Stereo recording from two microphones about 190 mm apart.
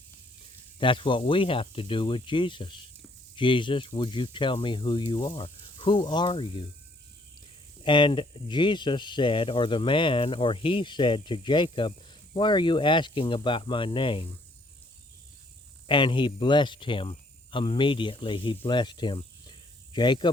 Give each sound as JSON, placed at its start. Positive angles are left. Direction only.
{"t": 0.8, "sound": "speech", "side_deg": 25}
{"t": 7.9, "sound": "speech", "side_deg": 25}
{"t": 15.9, "sound": "speech", "side_deg": 25}